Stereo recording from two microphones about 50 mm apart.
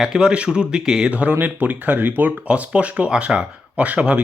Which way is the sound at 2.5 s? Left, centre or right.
Right.